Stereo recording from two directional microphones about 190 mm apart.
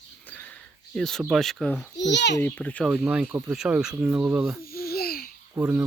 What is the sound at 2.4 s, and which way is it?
Speech, 10° left (ahead or behind).